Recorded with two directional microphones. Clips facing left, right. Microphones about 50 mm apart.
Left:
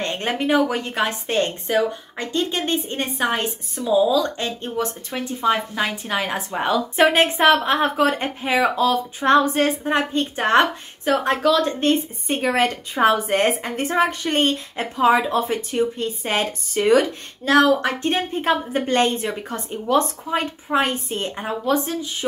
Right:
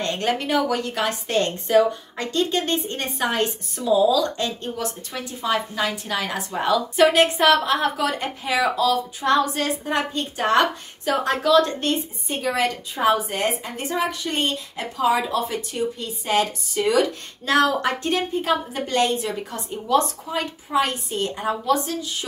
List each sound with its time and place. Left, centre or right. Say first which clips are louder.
0.0 s a woman's voice: even; left
11.4 s a woman's voice: right 2 dB; centre
12.3 s a woman's voice: left 3 dB; left
17.0 s a woman's voice: right 1 dB; left
17.8 s a woman's voice: left 1 dB; left